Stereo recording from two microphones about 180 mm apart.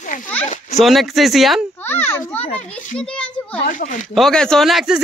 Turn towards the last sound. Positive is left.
turn(degrees=0)  # may be behind; listen again after turning